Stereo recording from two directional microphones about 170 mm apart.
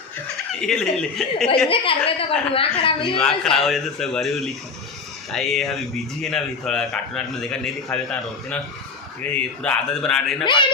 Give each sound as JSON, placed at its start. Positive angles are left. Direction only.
{"t": 0.6, "sound": "a man's voice", "side_deg": 5}
{"t": 1.7, "sound": "a woman's voice", "side_deg": 30}
{"t": 3.2, "sound": "a man's voice", "side_deg": 0}
{"t": 9.3, "sound": "a man's voice", "side_deg": 5}
{"t": 10.4, "sound": "a man's voice", "side_deg": 30}